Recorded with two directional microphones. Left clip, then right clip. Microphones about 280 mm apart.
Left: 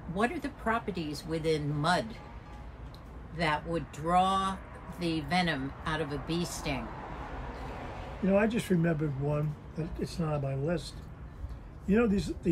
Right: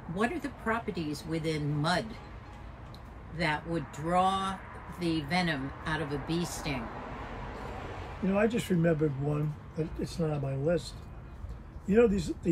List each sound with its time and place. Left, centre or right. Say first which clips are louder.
0.1 s speech: left 1 dB; centre
3.3 s speech: left 1 dB; centre
8.3 s speech: left 1 dB; centre
11.9 s speech: right 4 dB; centre